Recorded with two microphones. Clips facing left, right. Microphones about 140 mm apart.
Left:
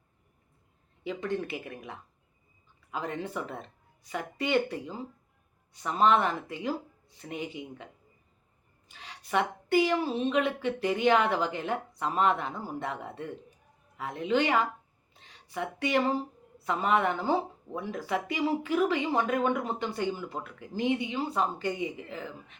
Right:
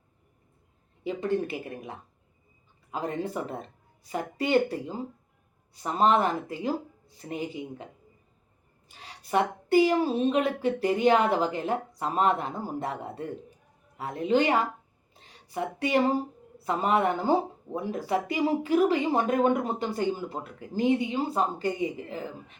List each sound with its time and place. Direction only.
1.0 s speech: 30° right (ahead or behind)
8.9 s a woman's voice: 35° right (ahead or behind)